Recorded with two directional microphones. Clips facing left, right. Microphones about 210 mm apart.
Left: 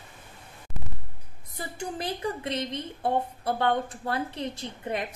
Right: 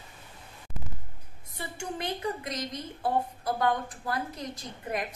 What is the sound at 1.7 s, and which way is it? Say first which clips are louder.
A woman's voice: left 1 dB; 35° left (ahead or behind).